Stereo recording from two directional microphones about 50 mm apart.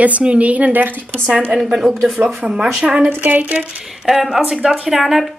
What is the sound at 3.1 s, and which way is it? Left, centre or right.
Speech, right.